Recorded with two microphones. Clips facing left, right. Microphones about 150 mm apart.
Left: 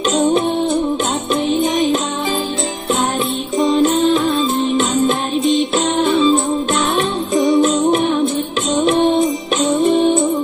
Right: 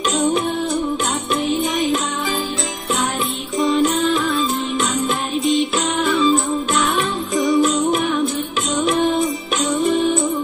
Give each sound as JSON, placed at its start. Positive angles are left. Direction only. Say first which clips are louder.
{"t": 0.1, "sound": "music", "louder": "left 4 dB", "side_deg": 25}
{"t": 3.5, "sound": "music", "louder": "left 3 dB", "side_deg": 25}